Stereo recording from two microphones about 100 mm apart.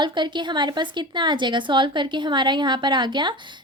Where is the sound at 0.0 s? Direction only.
50° right (ahead or behind).